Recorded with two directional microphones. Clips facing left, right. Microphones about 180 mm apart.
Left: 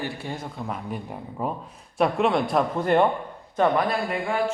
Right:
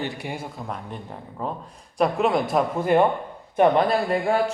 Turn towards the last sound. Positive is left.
turn(degrees=-35)  # may be behind; listen again after turning